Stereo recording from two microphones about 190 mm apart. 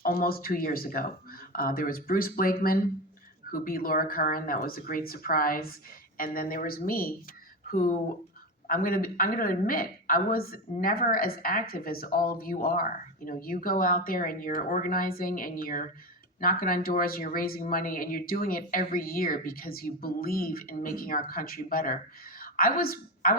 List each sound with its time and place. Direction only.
0.0 s a woman's voice: 50° left (ahead or behind)